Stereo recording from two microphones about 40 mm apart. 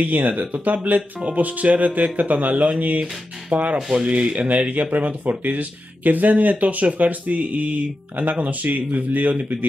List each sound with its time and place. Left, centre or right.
0.0 s speech: right